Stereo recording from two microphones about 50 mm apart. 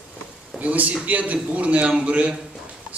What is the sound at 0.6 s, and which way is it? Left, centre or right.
A man's voice, right.